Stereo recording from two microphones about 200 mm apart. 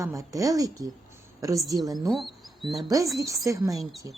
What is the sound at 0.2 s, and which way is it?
A woman's voice, 15° right (ahead or behind).